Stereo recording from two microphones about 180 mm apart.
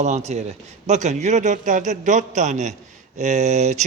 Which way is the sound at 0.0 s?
40° right (ahead or behind).